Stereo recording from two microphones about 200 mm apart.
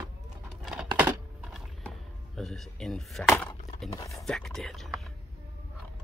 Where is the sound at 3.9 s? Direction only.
15° left (ahead or behind).